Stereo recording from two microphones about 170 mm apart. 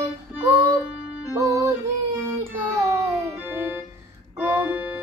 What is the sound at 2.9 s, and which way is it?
Music, 15° right (ahead or behind).